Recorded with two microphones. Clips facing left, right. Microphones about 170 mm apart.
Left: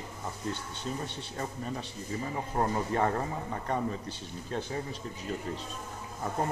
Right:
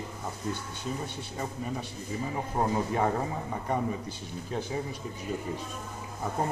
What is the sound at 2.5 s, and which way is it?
A man's voice, 10° right (ahead or behind).